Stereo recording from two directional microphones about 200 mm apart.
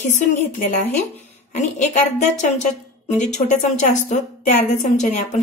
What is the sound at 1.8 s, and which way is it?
A woman's voice, 35° left (ahead or behind).